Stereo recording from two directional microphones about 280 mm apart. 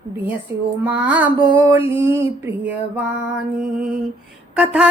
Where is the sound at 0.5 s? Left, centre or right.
Centre.